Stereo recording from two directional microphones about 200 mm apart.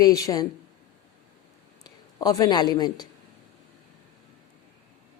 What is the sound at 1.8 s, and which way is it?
A man's voice, 20° left (ahead or behind).